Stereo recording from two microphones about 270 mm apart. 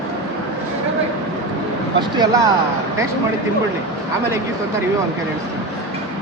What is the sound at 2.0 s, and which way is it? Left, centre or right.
Speech, centre.